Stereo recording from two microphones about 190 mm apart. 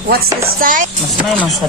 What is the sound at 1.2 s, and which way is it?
Speech, 5° right (ahead or behind).